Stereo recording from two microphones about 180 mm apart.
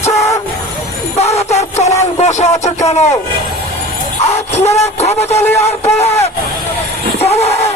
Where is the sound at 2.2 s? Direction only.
40° left (ahead or behind).